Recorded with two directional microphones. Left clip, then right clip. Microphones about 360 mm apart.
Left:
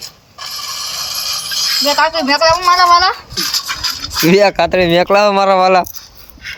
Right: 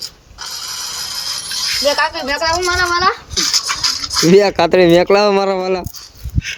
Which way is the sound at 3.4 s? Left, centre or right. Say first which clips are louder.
Right 2 dB; right.